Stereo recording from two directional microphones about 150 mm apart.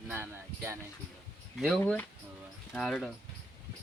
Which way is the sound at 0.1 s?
10° right (ahead or behind).